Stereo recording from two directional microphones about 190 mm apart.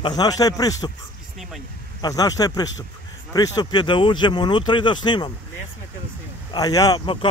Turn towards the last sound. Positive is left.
turn(degrees=25)  # may be behind; listen again after turning